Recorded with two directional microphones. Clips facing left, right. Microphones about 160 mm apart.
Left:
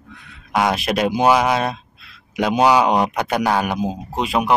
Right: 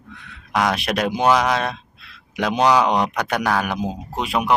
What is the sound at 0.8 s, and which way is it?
Speech, 5° left (ahead or behind).